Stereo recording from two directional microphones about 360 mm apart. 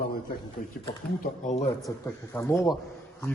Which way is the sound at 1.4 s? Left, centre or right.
Centre.